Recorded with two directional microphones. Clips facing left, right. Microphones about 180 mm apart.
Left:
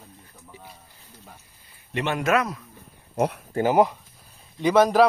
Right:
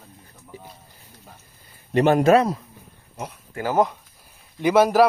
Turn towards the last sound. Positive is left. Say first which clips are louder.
# right 1 dB
turn(degrees=-5)  # may be behind; listen again after turning